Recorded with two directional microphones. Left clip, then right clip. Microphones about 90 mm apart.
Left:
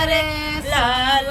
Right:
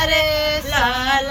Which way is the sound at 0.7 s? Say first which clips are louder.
Left 3 dB; 30° left (ahead or behind).